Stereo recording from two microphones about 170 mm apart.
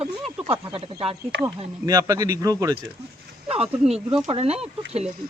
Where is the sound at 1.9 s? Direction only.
20° right (ahead or behind).